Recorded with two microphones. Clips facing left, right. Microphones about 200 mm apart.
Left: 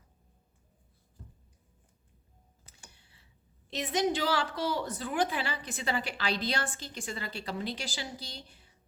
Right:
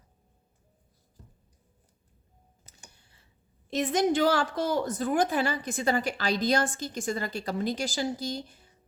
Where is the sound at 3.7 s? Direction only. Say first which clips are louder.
Right 5 dB; 50° right (ahead or behind).